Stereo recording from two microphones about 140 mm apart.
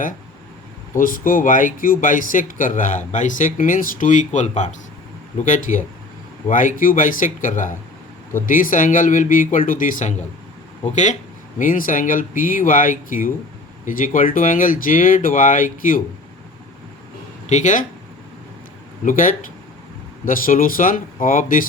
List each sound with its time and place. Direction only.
0.9 s speech: 85° left; by 4.7 s 55° left (ahead or behind)
5.4 s speech: 65° left (ahead or behind)
11.6 s speech: 75° left (ahead or behind)
17.4 s speech: 60° left (ahead or behind)
19.0 s speech: 70° left (ahead or behind)